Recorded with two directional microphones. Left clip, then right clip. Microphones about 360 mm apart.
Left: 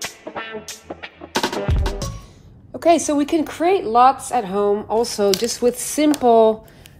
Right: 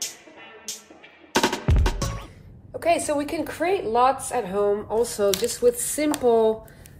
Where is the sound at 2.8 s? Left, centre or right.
Centre.